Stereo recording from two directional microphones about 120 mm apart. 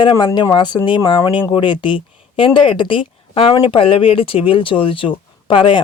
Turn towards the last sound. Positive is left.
turn(degrees=45)  # may be behind; listen again after turning